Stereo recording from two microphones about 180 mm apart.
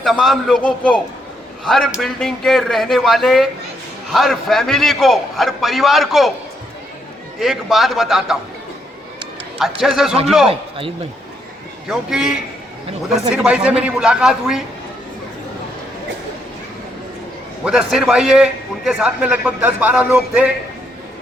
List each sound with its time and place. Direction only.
0.0 s a man's voice: centre (ahead or behind)
7.3 s a man's voice: centre (ahead or behind)
9.8 s a man's voice: centre (ahead or behind)
10.5 s speech: 30° right (ahead or behind)
11.9 s a man's voice: 5° right (ahead or behind)
17.7 s a man's voice: 5° right (ahead or behind)